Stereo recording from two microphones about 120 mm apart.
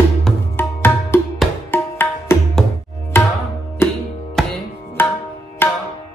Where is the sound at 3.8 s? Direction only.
20° left (ahead or behind).